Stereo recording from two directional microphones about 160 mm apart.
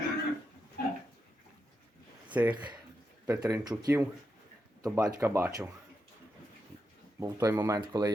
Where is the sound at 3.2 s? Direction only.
20° right (ahead or behind).